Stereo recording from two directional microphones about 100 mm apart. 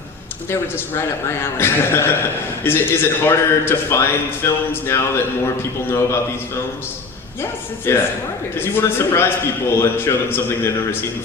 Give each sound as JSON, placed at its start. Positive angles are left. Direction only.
{"t": 0.5, "sound": "a man's voice", "side_deg": 25}
{"t": 7.9, "sound": "a man's voice", "side_deg": 25}